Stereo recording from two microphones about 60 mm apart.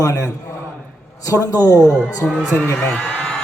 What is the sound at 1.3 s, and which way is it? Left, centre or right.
Speech, left.